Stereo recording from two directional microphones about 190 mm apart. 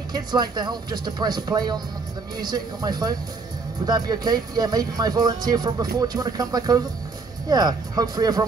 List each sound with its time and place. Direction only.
0.1 s speech: 20° right (ahead or behind)